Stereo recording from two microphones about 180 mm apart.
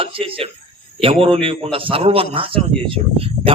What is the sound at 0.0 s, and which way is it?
Speech, 30° right (ahead or behind).